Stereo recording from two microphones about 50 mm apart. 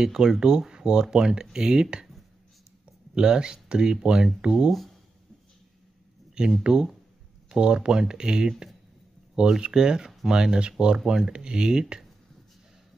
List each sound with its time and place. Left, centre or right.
0.0 s speech: centre
3.2 s speech: centre
4.5 s speech: centre
6.6 s speech: centre